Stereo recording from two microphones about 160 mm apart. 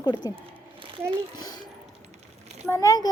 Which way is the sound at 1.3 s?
25° left (ahead or behind).